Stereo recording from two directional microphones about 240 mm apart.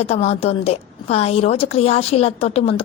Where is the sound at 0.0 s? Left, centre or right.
Left.